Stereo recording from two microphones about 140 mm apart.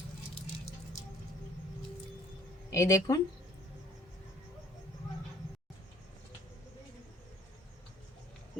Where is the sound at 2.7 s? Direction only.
20° left (ahead or behind).